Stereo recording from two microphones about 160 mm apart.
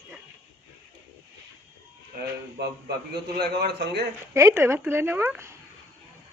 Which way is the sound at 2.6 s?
90° right.